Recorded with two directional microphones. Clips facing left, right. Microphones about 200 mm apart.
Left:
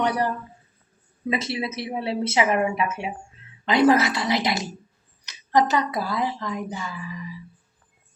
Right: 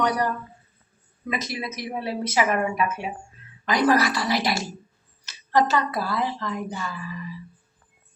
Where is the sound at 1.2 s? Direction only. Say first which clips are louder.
Left 4 dB; 25° left (ahead or behind).